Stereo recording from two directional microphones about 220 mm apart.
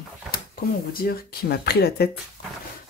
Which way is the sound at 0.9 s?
45° left (ahead or behind).